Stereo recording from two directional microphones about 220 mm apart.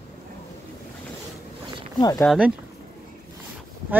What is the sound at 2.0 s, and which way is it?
Speech, 15° left (ahead or behind).